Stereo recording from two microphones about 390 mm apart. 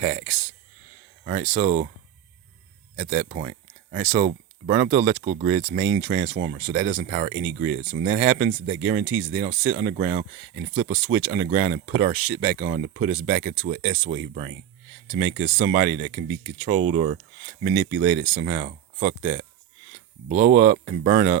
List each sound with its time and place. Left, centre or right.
1.2 s speech: centre
2.9 s speech: right